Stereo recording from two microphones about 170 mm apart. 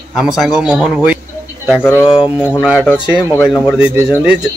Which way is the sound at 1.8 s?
15° left (ahead or behind).